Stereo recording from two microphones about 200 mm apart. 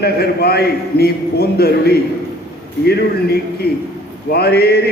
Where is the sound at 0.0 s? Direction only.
50° left (ahead or behind).